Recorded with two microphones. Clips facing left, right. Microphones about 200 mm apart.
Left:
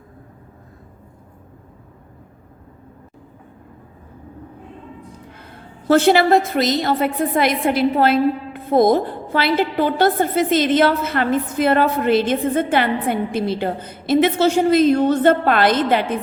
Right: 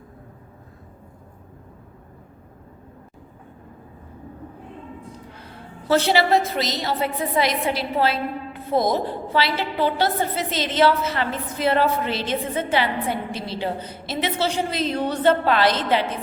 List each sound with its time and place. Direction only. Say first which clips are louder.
5.9 s a woman's voice: left 5 dB; 50° left (ahead or behind)